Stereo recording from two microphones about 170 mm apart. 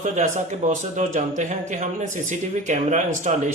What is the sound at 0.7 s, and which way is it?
Speech, 45° right (ahead or behind).